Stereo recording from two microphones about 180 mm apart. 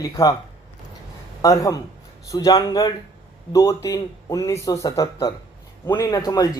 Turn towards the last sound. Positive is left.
turn(degrees=20)  # may be behind; listen again after turning